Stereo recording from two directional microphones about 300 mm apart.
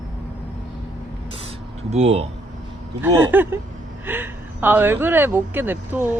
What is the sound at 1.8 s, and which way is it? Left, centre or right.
Speech, right.